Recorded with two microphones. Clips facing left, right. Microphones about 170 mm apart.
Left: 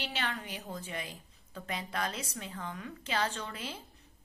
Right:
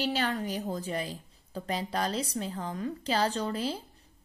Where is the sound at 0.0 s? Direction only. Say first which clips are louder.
Right 8 dB; 40° right (ahead or behind).